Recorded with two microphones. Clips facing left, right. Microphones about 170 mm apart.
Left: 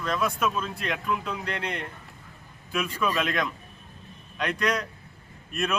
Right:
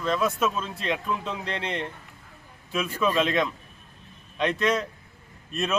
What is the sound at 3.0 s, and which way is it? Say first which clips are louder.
A man's voice: right 5 dB; 25° right (ahead or behind).